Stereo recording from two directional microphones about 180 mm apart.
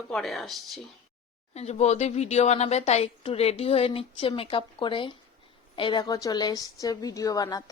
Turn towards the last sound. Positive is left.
turn(degrees=20)  # may be behind; listen again after turning